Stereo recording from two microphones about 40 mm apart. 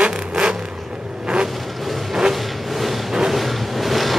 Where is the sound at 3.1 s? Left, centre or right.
Centre.